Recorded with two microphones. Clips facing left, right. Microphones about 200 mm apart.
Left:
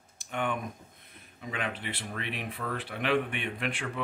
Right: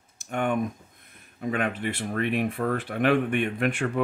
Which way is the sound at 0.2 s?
45° right (ahead or behind).